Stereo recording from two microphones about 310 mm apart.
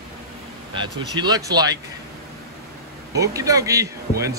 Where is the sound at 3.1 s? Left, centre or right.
Centre.